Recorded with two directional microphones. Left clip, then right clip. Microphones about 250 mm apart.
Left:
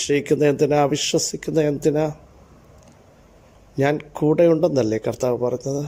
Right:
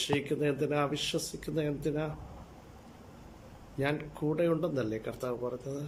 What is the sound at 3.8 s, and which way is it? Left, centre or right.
Speech, left.